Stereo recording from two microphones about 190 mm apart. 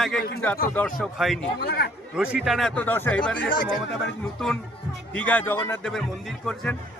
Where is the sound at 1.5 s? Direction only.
55° left (ahead or behind).